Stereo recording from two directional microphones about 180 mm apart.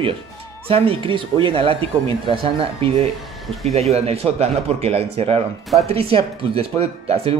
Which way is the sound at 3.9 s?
35° right (ahead or behind).